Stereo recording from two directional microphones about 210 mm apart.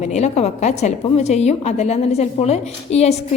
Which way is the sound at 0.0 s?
30° left (ahead or behind).